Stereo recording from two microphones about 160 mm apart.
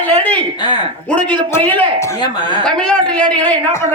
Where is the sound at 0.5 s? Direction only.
25° left (ahead or behind).